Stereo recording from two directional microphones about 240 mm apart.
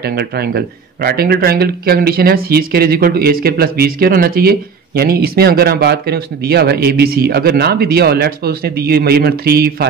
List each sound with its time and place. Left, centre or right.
0.0 s speech: right